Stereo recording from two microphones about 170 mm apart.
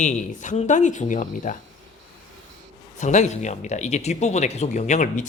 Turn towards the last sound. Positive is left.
turn(degrees=45)  # may be behind; listen again after turning